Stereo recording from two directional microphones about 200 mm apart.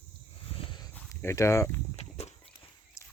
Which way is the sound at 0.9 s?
15° left (ahead or behind).